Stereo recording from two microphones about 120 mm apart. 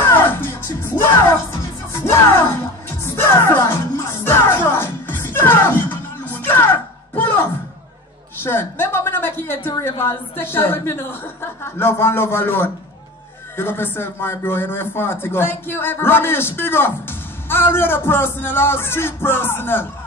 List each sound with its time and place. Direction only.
0.0 s music: 15° left (ahead or behind)
8.4 s a sound: 20° left (ahead or behind)
10.3 s speech: 20° left (ahead or behind)